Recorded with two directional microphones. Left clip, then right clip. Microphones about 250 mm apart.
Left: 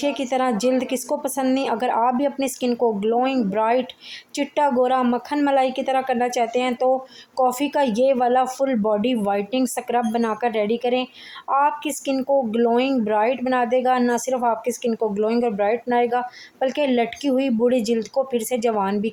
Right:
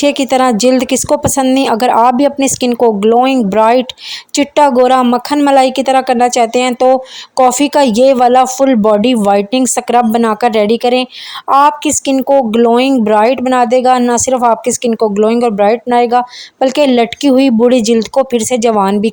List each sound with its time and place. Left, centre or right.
0.0 s a woman's voice: right